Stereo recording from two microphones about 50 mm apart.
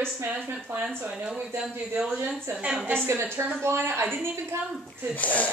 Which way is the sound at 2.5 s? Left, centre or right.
Right.